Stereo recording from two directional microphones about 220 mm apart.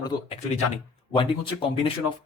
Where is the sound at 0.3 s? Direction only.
30° left (ahead or behind).